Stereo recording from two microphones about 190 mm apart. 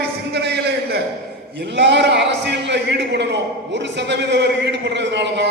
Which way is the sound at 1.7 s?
65° right (ahead or behind).